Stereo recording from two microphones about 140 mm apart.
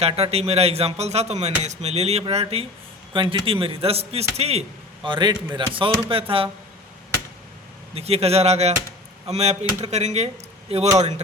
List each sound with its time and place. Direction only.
0.0 s a man's voice: 45° right (ahead or behind)
5.0 s a man's voice: 35° right (ahead or behind)
7.9 s speech: 45° right (ahead or behind)